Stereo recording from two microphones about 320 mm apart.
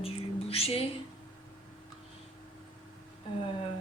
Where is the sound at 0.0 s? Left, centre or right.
Centre.